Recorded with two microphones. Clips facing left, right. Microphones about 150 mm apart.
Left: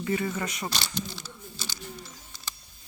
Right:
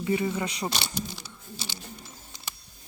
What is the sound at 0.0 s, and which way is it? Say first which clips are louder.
Speech: right 2 dB; 15° right (ahead or behind).